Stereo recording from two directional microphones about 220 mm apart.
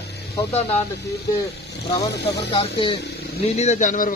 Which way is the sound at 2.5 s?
20° left (ahead or behind).